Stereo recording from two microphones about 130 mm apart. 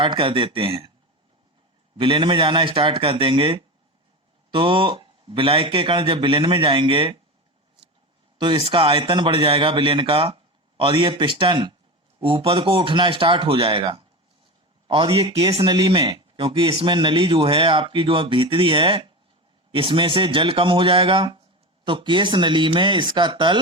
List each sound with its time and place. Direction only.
0.0 s speech: 40° right (ahead or behind)
2.0 s speech: 40° right (ahead or behind)
8.4 s speech: 40° right (ahead or behind)